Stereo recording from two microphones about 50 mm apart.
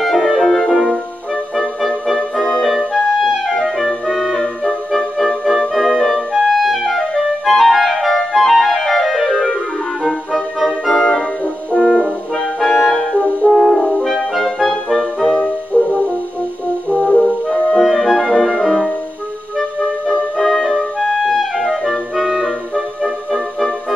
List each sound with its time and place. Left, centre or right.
0.0 s music: centre
2.9 s clarinet: centre
5.8 s music: centre
6.3 s clarinet: centre
8.2 s music: centre
11.7 s french horn: centre
12.5 s music: centre
13.5 s french horn: centre
14.1 s clarinet: centre
15.7 s french horn: left
17.6 s music: centre
20.1 s clarinet: centre